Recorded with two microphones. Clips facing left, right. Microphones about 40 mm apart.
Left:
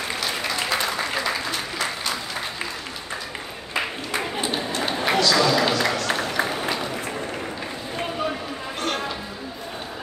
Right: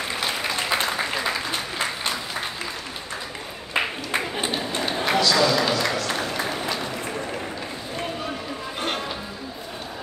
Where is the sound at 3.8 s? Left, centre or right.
Right.